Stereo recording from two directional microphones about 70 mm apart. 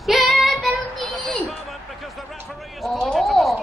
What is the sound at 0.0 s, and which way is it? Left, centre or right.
Child singing, centre.